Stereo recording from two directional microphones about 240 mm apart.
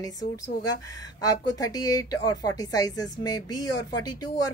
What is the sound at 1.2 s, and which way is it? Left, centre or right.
A woman's voice, centre.